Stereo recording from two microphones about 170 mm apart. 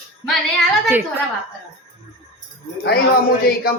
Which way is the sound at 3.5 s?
60° left (ahead or behind).